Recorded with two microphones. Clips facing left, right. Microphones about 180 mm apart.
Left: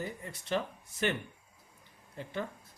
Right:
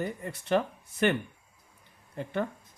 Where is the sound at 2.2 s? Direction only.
60° right (ahead or behind).